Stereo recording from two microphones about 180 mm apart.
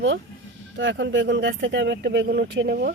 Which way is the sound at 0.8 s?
85° right.